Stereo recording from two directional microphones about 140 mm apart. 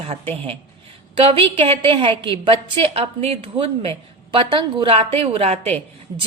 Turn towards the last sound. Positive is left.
turn(degrees=-50)  # may be behind; listen again after turning